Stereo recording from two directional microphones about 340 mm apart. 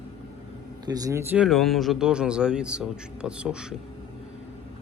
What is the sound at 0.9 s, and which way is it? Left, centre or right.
Speech, centre.